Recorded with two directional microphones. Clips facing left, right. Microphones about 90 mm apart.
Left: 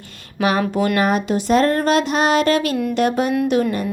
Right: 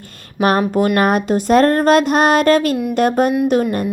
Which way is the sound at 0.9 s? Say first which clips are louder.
Right 3 dB; 50° right (ahead or behind).